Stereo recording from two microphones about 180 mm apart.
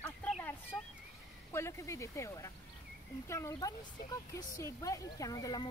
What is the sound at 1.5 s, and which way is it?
Speech, 15° left (ahead or behind).